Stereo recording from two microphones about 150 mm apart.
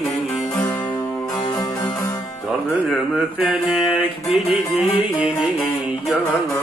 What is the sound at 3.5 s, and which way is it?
Music, 5° right (ahead or behind).